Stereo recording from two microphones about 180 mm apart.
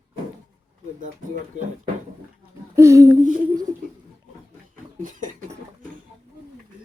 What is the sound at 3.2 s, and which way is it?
Speech, 45° right (ahead or behind).